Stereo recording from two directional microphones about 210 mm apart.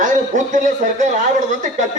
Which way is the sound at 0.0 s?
35° right (ahead or behind).